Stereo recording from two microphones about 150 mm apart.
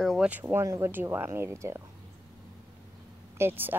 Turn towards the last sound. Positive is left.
turn(degrees=-15)  # may be behind; listen again after turning